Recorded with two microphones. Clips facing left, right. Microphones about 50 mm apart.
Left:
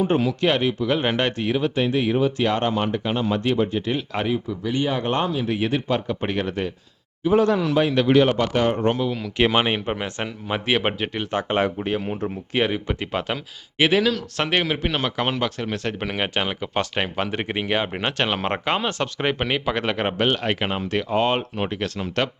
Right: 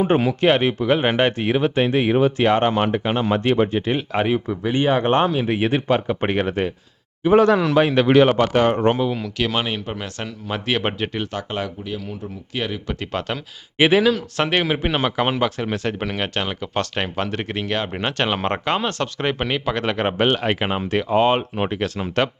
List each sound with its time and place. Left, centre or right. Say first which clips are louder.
0.0 s speech: right 3 dB; right
0.9 s speech: right 4 dB; right
4.3 s speech: right 3 dB; right
7.4 s speech: right 4 dB; right
8.0 s speech: right 2 dB; right
8.3 s speech: right 4 dB; right
9.0 s speech: right 3 dB; centre
9.4 s speech: left 5 dB; left; by 11.3 s centre
11.3 s speech: left 5 dB; left
12.5 s speech: left 4 dB; left
12.9 s speech: even; centre
13.7 s speech: right 3 dB; centre
16.1 s speech: even; centre
20.1 s speech: right 3 dB; centre